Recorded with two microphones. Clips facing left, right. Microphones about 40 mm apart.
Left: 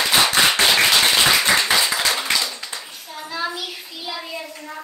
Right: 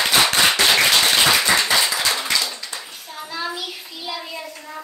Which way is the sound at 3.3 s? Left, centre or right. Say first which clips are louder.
Left 1 dB; centre.